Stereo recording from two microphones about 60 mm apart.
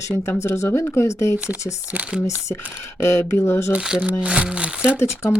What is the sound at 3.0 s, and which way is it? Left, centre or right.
Speech, left.